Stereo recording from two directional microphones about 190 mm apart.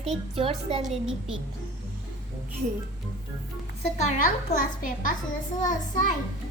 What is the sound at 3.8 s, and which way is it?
A child's voice, 35° left (ahead or behind).